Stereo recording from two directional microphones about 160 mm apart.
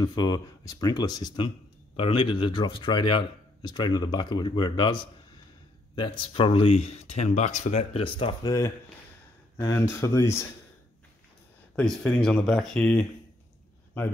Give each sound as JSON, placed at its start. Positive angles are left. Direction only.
{"t": 0.0, "sound": "speech", "side_deg": 25}
{"t": 8.5, "sound": "speech", "side_deg": 20}
{"t": 11.7, "sound": "speech", "side_deg": 5}